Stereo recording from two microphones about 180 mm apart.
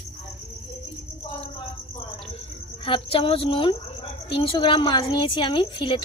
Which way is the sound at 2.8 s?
30° left (ahead or behind).